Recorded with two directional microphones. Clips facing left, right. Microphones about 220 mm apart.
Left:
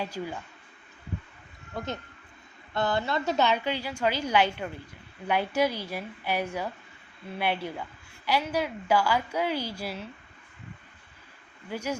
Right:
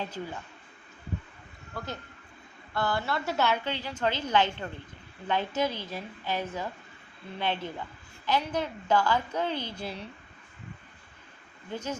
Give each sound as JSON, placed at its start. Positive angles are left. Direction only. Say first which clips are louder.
{"t": 0.0, "sound": "a woman's voice", "louder": "left 2 dB", "side_deg": 10}
{"t": 1.7, "sound": "a woman's voice", "louder": "left 4 dB", "side_deg": 25}
{"t": 11.7, "sound": "a woman's voice", "louder": "left 2 dB", "side_deg": 10}